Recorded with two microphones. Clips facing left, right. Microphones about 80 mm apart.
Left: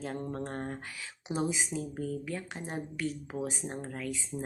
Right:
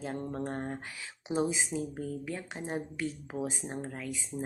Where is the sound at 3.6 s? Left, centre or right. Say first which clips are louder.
Left 1 dB; centre.